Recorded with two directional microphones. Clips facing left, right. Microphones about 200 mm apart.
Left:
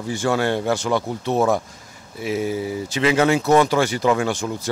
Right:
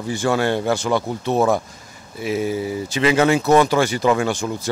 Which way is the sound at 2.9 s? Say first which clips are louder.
Right 1 dB; 10° right (ahead or behind).